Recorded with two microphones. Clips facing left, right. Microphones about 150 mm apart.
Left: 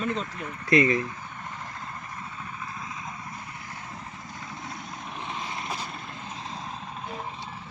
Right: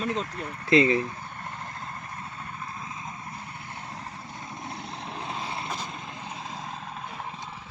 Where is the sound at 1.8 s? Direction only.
30° right (ahead or behind).